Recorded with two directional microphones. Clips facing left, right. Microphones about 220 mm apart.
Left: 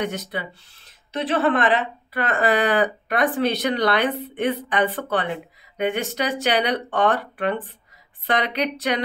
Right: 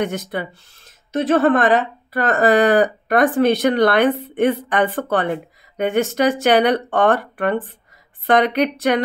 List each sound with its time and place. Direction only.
0.0 s speech: 50° right (ahead or behind)